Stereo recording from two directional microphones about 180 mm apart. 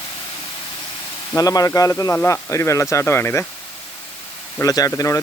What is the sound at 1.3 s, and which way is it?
Speech, 20° left (ahead or behind).